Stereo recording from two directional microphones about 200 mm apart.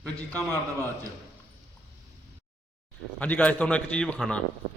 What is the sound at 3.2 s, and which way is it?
A man's voice, 5° left (ahead or behind).